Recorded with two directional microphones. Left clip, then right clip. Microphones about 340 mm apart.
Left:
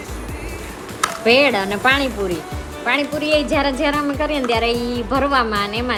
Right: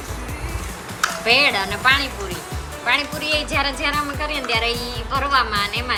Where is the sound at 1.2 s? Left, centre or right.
Centre.